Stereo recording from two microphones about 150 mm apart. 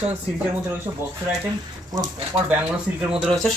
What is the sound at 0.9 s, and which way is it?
Speech, 30° right (ahead or behind).